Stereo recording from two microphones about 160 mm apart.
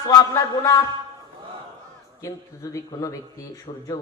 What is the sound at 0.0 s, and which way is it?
Speech, 20° left (ahead or behind).